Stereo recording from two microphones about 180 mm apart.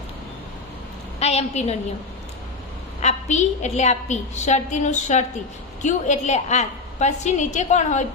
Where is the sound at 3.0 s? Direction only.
40° left (ahead or behind).